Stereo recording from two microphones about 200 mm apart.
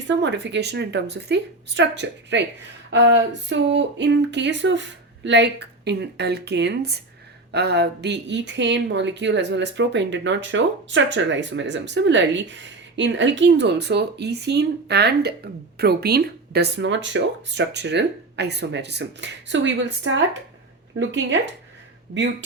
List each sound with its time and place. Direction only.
0.1 s speech: 60° right (ahead or behind)